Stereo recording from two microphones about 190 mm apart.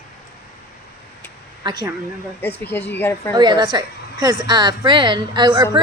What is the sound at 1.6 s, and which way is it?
Speech, 20° right (ahead or behind).